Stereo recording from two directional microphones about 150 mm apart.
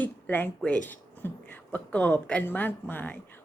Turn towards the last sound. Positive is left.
turn(degrees=10)  # may be behind; listen again after turning